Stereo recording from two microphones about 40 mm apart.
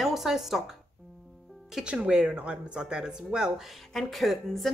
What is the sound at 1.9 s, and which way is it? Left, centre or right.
Speech, centre.